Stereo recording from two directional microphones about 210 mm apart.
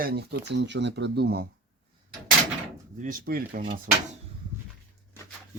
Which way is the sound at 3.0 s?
40° right (ahead or behind).